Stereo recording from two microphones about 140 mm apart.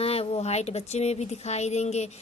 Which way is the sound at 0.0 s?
45° left (ahead or behind).